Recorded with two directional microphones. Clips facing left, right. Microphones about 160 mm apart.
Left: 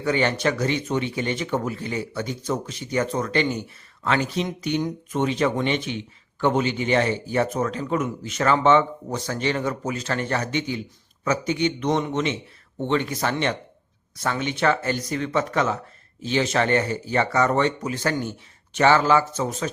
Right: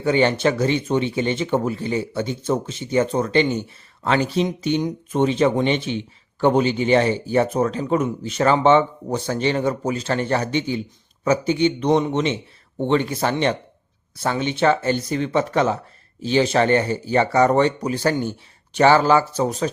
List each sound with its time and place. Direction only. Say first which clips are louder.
0.0 s speech: right 4 dB; 25° right (ahead or behind)